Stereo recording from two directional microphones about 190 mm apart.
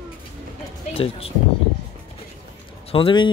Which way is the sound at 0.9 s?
30° left (ahead or behind).